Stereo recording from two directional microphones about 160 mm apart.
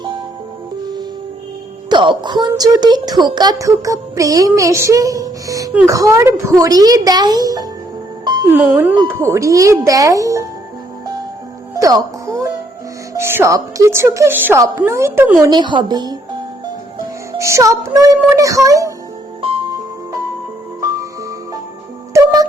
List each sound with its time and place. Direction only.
1.9 s a woman's voice: 30° right (ahead or behind)
2.5 s music: 25° right (ahead or behind)
5.7 s a woman's voice: 20° right (ahead or behind)
6.6 s music: 25° right (ahead or behind)
8.4 s a woman's voice: 10° right (ahead or behind)
9.0 s music: 15° right (ahead or behind)
11.7 s music: 20° right (ahead or behind)
13.1 s a woman's voice: 15° right (ahead or behind)
15.4 s music: 30° right (ahead or behind)
17.3 s music: 20° right (ahead or behind)
19.4 s music: 35° right (ahead or behind)
20.8 s music: 20° right (ahead or behind)